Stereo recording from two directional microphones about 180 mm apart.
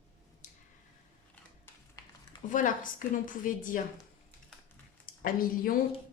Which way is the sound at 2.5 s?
45° left (ahead or behind).